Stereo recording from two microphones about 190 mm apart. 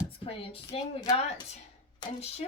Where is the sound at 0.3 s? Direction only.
30° left (ahead or behind).